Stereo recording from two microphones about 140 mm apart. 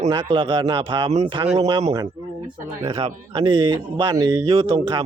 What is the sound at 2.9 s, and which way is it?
Speech, 40° right (ahead or behind).